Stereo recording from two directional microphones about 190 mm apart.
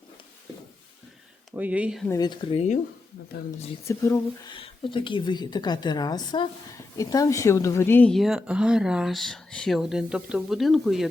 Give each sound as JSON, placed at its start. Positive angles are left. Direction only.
{"t": 1.5, "sound": "speech", "side_deg": -10}
{"t": 2.0, "sound": "a woman's voice", "side_deg": 20}
{"t": 3.8, "sound": "speech", "side_deg": 15}
{"t": 4.5, "sound": "a woman's voice", "side_deg": 25}